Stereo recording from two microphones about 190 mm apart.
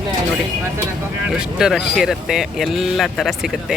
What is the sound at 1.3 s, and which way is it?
Speech, 5° right (ahead or behind).